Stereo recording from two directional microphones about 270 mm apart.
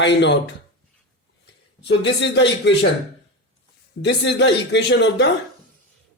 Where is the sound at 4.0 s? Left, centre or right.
Left.